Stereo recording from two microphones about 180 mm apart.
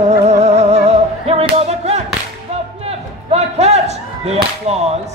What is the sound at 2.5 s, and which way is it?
Whip, 35° right (ahead or behind).